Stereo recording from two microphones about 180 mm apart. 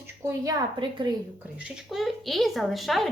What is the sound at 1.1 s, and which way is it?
Speech, 25° right (ahead or behind).